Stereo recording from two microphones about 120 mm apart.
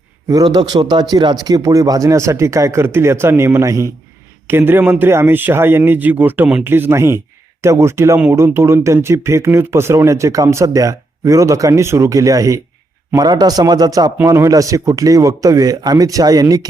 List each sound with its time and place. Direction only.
0.3 s a man's voice: 35° right (ahead or behind)